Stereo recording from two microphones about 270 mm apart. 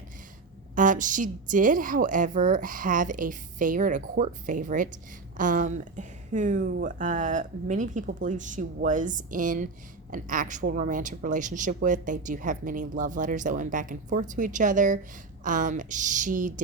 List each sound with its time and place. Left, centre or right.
0.8 s speech: right